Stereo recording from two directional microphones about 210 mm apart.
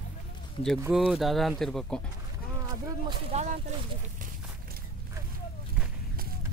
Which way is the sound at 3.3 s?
30° right (ahead or behind).